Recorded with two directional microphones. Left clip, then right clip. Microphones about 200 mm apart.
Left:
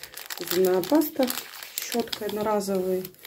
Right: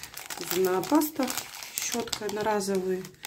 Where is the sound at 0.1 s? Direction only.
25° right (ahead or behind).